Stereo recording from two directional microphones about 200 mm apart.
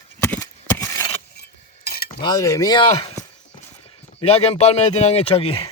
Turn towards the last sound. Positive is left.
turn(degrees=30)  # may be behind; listen again after turning